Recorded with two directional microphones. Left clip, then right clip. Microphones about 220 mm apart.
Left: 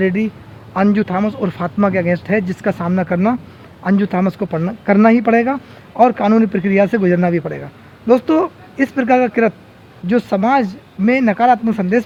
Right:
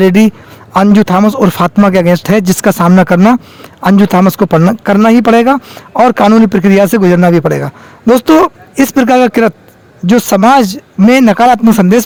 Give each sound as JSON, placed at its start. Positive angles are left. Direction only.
{"t": 0.0, "sound": "speech", "side_deg": -50}